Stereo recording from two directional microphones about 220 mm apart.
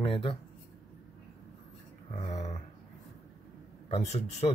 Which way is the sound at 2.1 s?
30° left (ahead or behind).